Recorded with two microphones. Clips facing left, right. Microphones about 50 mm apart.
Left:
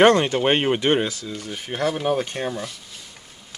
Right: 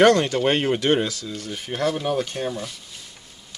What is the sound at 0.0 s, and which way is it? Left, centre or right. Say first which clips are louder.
Speech: left 1 dB; left.